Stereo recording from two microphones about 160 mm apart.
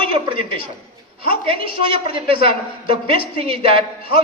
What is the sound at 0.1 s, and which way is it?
A man's voice, 30° right (ahead or behind).